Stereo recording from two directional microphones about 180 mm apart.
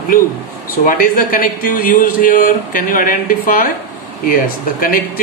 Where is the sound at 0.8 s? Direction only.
50° left (ahead or behind).